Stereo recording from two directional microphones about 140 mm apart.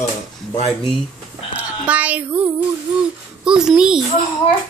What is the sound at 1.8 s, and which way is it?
Speech, 10° right (ahead or behind).